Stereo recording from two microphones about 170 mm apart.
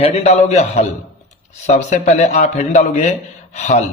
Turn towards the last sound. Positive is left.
turn(degrees=45)  # may be behind; listen again after turning